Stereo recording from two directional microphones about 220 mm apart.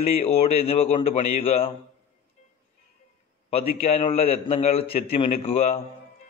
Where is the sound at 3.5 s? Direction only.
25° left (ahead or behind).